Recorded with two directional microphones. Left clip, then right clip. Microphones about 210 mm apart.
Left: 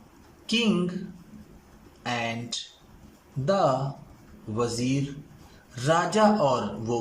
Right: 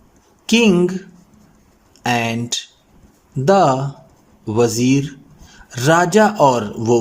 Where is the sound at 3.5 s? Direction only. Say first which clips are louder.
Right 10 dB; 50° right (ahead or behind).